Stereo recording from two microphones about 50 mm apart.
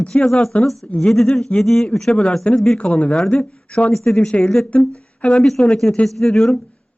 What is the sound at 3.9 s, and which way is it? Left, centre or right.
Speech, centre.